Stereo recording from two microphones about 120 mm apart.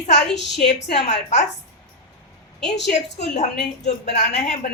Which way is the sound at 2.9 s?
75° left (ahead or behind).